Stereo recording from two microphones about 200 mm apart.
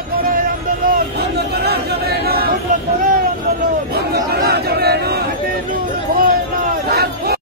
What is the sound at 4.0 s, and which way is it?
Chatter, 50° right (ahead or behind).